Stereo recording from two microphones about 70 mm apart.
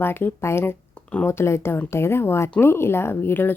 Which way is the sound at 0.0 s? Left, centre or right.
Left.